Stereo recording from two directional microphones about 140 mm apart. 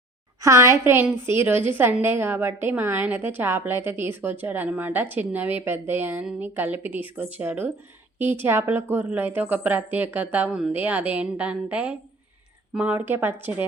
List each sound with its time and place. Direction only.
0.4 s a woman's voice: 20° right (ahead or behind)